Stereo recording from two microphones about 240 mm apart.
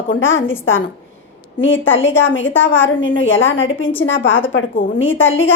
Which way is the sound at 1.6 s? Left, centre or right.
Left.